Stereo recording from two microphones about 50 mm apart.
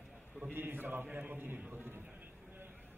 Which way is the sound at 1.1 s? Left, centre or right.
Right.